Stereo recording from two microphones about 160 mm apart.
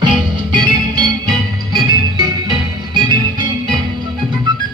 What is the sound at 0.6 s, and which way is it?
Music, 25° right (ahead or behind).